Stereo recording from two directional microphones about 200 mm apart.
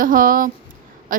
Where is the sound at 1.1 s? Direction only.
45° right (ahead or behind).